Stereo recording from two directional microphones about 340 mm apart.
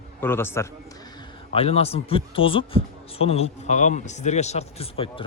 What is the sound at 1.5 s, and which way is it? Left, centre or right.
Speech, centre.